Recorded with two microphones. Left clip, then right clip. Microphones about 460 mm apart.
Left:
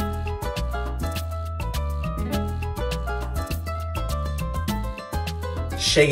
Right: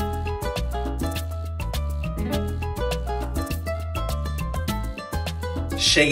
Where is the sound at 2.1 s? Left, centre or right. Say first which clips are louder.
Right 3 dB; right.